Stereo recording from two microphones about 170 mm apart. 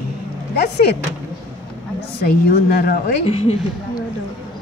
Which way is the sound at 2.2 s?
60° left (ahead or behind).